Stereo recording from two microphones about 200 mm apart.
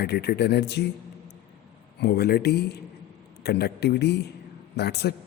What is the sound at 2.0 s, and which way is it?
Speech, 55° left (ahead or behind).